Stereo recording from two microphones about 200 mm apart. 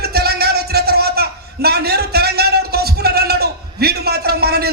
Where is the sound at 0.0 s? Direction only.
50° right (ahead or behind).